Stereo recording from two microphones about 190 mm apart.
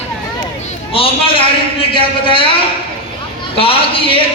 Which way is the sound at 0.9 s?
30° left (ahead or behind).